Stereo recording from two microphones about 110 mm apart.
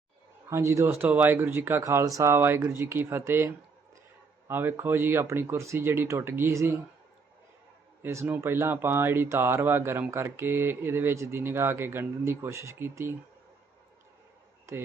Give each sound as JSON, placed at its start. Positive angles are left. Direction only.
{"t": 0.5, "sound": "speech", "side_deg": -25}
{"t": 8.0, "sound": "speech", "side_deg": -20}
{"t": 14.7, "sound": "speech", "side_deg": -25}